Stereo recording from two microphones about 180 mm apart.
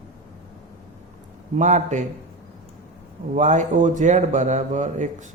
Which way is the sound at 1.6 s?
40° right (ahead or behind).